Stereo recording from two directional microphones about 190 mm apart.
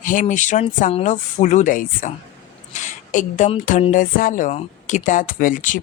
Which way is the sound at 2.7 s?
40° left (ahead or behind).